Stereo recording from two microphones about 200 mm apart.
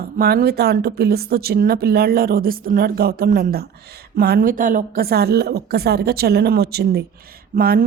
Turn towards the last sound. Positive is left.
turn(degrees=-50)  # may be behind; listen again after turning